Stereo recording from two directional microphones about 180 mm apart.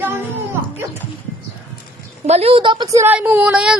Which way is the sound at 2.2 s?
35° right (ahead or behind).